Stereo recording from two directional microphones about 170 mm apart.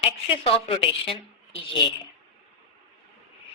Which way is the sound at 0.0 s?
35° left (ahead or behind).